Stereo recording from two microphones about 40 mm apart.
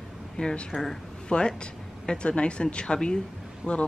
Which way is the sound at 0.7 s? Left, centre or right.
Centre.